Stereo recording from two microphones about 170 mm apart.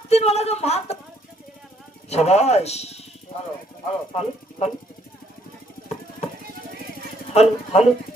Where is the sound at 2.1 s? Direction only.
40° left (ahead or behind).